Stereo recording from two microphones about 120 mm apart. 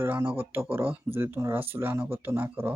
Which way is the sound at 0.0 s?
15° right (ahead or behind).